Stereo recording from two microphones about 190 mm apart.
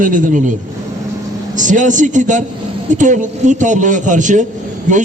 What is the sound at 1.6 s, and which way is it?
A man's voice, 40° right (ahead or behind).